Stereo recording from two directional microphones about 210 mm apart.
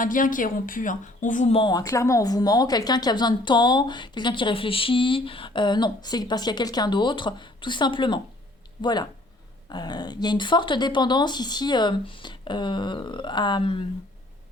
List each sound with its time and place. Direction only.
0.0 s speech: 40° left (ahead or behind); by 13.8 s 25° left (ahead or behind)